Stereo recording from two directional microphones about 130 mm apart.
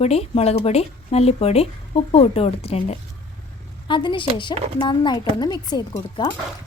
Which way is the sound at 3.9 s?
35° left (ahead or behind).